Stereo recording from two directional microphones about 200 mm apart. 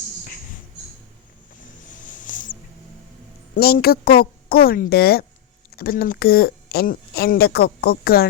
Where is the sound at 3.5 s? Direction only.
50° left (ahead or behind).